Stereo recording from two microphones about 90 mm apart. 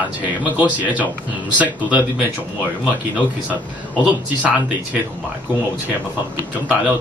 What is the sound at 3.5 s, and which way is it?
Speech, 15° right (ahead or behind).